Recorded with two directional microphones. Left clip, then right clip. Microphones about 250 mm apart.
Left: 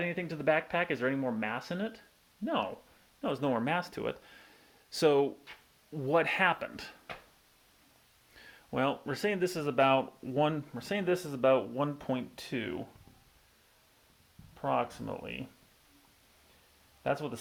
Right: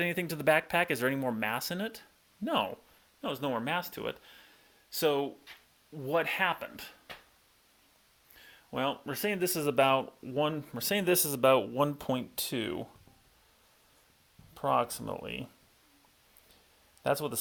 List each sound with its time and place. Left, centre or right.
0.0 s speech: right
3.2 s speech: centre
8.4 s speech: centre; by 10.3 s right
10.3 s speech: centre
10.8 s speech: right
14.5 s speech: right
17.0 s speech: right